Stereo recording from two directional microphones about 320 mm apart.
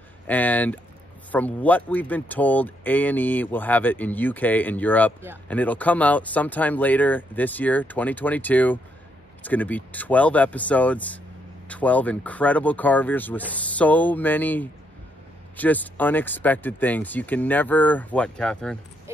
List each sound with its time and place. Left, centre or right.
0.3 s speech: centre